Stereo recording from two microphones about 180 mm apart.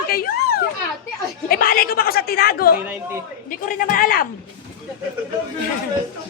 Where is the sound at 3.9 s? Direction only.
50° left (ahead or behind).